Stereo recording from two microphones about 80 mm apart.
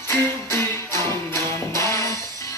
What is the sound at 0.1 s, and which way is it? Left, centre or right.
Music, left.